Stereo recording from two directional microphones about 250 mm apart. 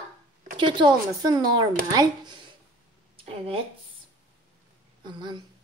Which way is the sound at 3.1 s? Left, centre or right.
Right.